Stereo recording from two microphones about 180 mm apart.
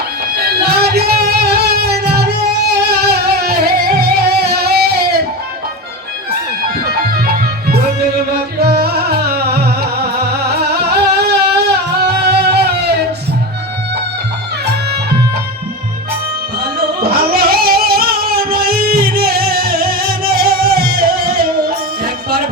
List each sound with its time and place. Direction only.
0.3 s music: 60° right (ahead or behind)
6.8 s music: 60° right (ahead or behind)
10.8 s singing: 65° right (ahead or behind)
12.0 s music: 65° right (ahead or behind)
17.0 s music: 60° right (ahead or behind)